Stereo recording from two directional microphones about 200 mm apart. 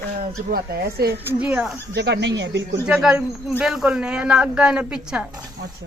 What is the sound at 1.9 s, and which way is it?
Speech, 60° right (ahead or behind).